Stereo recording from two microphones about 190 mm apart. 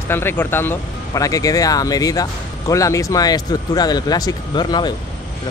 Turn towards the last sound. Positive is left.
turn(degrees=20)  # may be behind; listen again after turning